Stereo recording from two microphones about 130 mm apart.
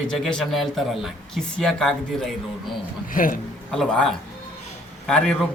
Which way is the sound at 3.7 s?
5° left (ahead or behind).